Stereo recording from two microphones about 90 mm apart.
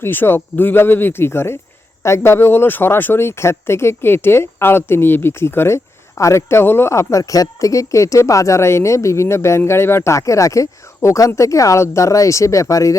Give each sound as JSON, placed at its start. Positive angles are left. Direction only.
{"t": 0.0, "sound": "speech", "side_deg": 25}